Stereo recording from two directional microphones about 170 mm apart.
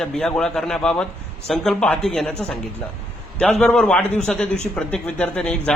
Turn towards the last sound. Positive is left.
turn(degrees=5)  # may be behind; listen again after turning